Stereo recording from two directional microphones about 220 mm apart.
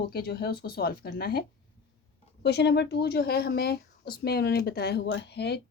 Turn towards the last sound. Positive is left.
turn(degrees=50)  # may be behind; listen again after turning